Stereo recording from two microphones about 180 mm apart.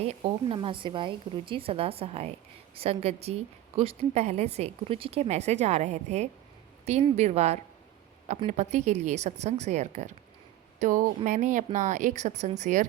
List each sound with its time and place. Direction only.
0.0 s a woman's voice: 35° right (ahead or behind)